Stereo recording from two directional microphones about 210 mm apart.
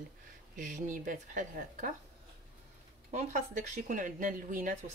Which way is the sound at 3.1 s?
35° right (ahead or behind).